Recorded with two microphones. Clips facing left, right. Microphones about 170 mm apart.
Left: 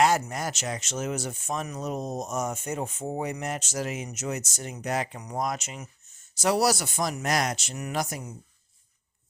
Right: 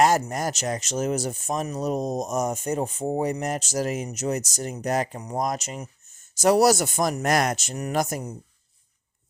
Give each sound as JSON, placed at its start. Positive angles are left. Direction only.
{"t": 0.0, "sound": "speech", "side_deg": -45}